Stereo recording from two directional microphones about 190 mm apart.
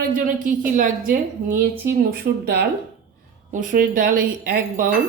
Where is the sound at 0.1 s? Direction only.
45° right (ahead or behind).